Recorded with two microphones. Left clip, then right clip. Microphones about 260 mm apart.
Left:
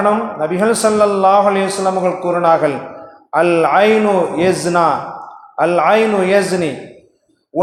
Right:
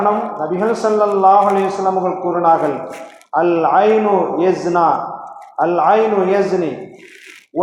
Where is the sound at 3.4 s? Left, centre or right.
Left.